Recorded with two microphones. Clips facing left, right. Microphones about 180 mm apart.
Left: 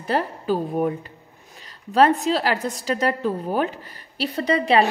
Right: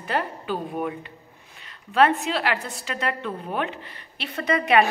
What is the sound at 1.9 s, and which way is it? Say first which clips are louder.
A woman's voice: left 3 dB; 35° left (ahead or behind).